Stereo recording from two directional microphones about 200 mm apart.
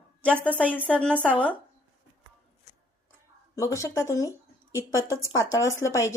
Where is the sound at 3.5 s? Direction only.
15° left (ahead or behind).